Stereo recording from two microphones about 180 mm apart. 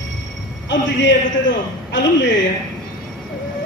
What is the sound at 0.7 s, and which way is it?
A man's voice, 90° left.